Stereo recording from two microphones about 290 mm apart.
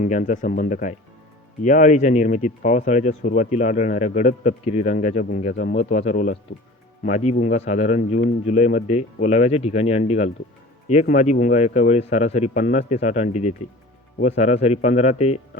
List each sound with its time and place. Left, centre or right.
0.0 s speech: left